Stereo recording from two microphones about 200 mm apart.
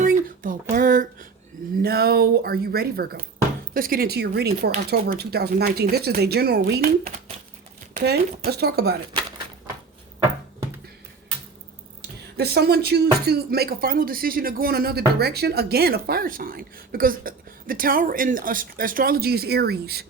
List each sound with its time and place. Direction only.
0.0 s a sound: 40° right (ahead or behind)
1.8 s speech: 50° right (ahead or behind)
7.9 s speech: 50° right (ahead or behind)
12.4 s speech: 55° right (ahead or behind)